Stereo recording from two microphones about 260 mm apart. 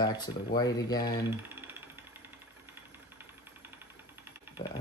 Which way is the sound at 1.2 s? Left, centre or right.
Centre.